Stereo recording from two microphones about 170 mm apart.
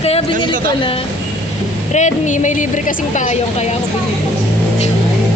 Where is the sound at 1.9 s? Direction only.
45° left (ahead or behind).